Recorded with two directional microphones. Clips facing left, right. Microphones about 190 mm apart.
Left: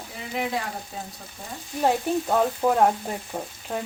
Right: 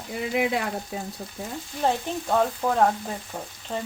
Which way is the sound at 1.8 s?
10° left (ahead or behind).